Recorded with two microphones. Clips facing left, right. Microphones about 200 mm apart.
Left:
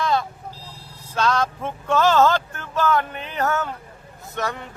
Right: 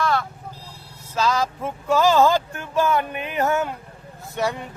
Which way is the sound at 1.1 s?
5° right (ahead or behind).